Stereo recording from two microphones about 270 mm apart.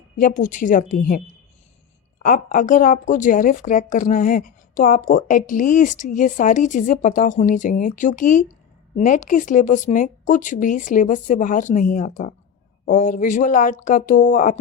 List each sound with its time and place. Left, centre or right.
0.2 s a woman's voice: left
2.2 s a woman's voice: left